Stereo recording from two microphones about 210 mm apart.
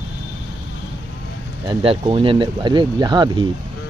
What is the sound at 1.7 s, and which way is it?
Speech, 25° right (ahead or behind).